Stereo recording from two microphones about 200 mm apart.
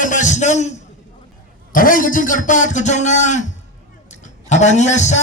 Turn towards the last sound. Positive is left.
turn(degrees=35)  # may be behind; listen again after turning